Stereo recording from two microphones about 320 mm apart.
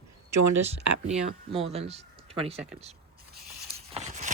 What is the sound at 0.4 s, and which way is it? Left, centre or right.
Speech, right.